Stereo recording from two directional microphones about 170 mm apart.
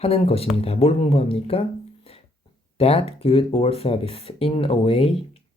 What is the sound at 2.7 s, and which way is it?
Speech, 35° left (ahead or behind).